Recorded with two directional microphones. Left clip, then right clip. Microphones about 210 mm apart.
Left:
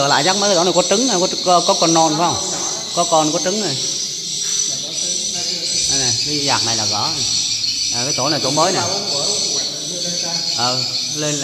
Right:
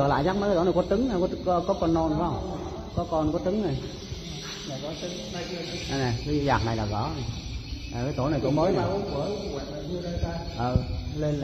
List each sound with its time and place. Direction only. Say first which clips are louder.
0.0 s speech: left 10 dB; 20° left (ahead or behind)
5.9 s speech: left 11 dB; 10° left (ahead or behind)
8.2 s speech: left 7 dB; 25° left (ahead or behind)